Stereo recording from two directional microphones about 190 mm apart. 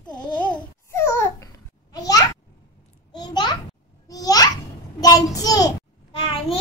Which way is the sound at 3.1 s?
20° left (ahead or behind).